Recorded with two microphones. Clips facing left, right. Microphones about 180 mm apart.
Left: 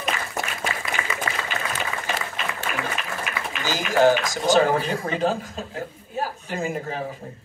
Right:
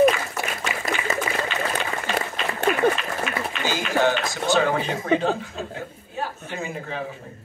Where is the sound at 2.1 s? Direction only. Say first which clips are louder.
Right 3 dB; 55° right (ahead or behind).